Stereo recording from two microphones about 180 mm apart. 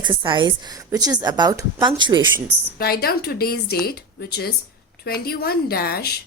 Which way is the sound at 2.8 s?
60° left (ahead or behind).